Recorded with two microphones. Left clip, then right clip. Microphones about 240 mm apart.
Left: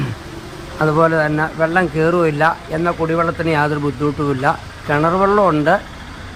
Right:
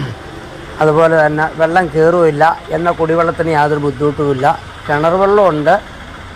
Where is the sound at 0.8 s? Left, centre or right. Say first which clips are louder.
Right 5 dB; centre.